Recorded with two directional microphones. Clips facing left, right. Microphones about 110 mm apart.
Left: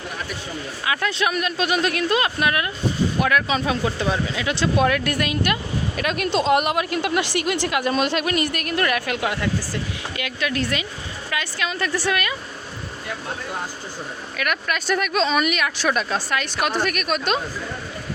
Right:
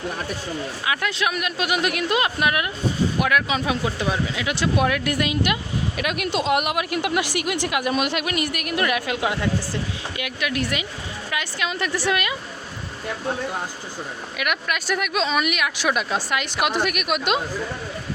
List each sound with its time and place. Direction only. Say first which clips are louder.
0.9 s a woman's voice: left 2 dB; 5° right (ahead or behind); by 12.4 s 20° right (ahead or behind)
14.3 s a woman's voice: left 1 dB; 10° right (ahead or behind)